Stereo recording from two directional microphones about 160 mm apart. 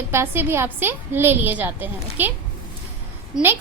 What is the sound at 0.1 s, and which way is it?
A woman's voice, 15° right (ahead or behind).